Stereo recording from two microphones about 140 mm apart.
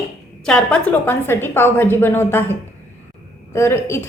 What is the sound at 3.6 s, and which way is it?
Speech, 20° left (ahead or behind).